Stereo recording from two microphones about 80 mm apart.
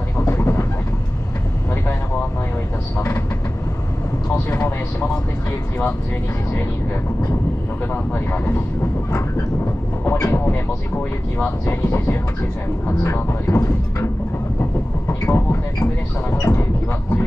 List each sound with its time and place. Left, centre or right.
0.3 s vehicle: left
4.5 s vehicle: left
7.9 s speech: left
10.0 s speech: left
11.6 s speech: left
14.6 s speech: left